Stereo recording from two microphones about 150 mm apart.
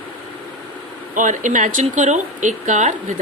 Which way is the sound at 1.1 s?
60° right (ahead or behind).